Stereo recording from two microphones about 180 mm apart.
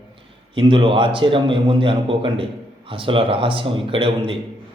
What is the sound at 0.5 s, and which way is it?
A man's voice, 30° right (ahead or behind).